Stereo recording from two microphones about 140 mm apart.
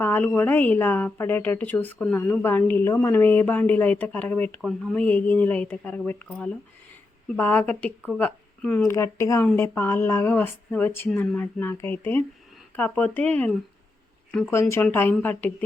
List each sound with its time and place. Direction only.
0.0 s a sound: 15° left (ahead or behind)
0.3 s speech: 10° left (ahead or behind)
7.3 s speech: 15° left (ahead or behind)
14.5 s speech: 20° left (ahead or behind)